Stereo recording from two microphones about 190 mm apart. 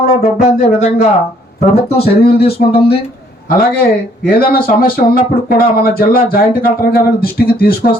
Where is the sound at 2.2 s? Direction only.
55° left (ahead or behind).